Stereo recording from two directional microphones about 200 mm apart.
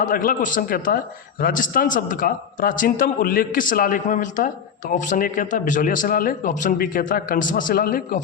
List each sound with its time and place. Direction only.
0.0 s a man's voice: 45° left (ahead or behind)